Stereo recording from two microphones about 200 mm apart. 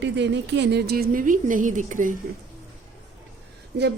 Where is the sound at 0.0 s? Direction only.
60° right (ahead or behind); by 2.1 s 40° right (ahead or behind).